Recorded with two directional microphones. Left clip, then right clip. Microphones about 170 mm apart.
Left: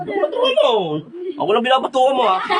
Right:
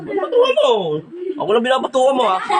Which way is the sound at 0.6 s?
30° left (ahead or behind).